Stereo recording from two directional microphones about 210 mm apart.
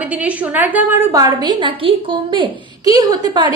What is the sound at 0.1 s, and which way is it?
A woman's voice, 5° right (ahead or behind).